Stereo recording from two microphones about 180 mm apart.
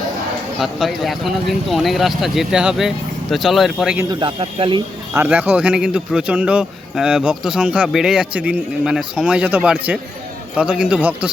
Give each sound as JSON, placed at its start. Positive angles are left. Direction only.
{"t": 0.6, "sound": "a man's voice", "side_deg": 0}
{"t": 4.1, "sound": "a man's voice", "side_deg": -25}
{"t": 5.1, "sound": "a man's voice", "side_deg": -10}